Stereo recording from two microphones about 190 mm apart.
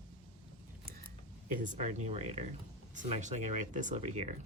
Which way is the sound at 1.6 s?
40° right (ahead or behind).